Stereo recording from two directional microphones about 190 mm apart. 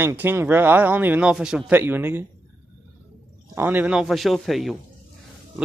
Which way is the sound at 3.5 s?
10° right (ahead or behind).